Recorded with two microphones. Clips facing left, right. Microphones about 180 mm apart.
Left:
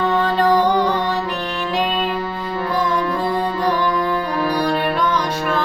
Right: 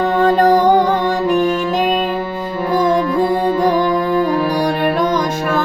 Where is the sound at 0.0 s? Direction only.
45° right (ahead or behind).